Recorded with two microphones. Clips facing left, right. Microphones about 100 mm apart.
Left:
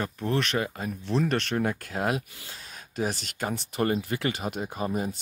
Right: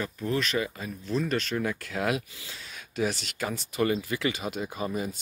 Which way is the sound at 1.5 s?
45° left (ahead or behind).